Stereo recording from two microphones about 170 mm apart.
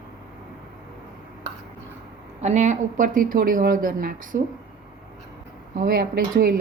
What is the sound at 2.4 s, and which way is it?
Speech, 40° right (ahead or behind).